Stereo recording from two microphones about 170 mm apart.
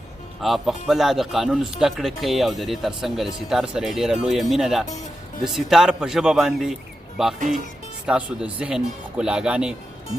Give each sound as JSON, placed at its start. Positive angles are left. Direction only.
{"t": 0.4, "sound": "speech", "side_deg": 0}
{"t": 7.3, "sound": "speech", "side_deg": -50}
{"t": 8.0, "sound": "speech", "side_deg": -5}